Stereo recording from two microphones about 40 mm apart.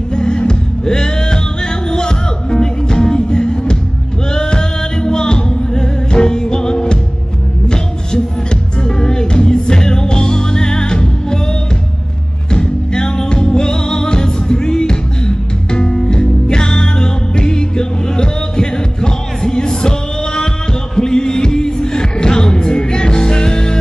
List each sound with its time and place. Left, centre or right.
0.1 s music: centre
12.4 s music: centre
20.9 s music: centre